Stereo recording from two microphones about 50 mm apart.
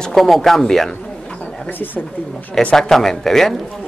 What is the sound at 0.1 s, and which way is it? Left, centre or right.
Speech, centre.